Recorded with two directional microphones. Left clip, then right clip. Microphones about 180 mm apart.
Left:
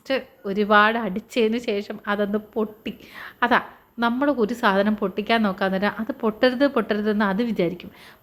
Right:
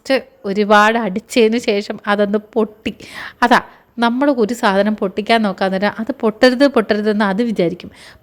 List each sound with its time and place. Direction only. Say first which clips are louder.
0.1 s a woman's voice: right 8 dB; 45° right (ahead or behind)